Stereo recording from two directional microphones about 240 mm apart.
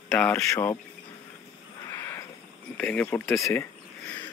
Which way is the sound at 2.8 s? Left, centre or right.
Centre.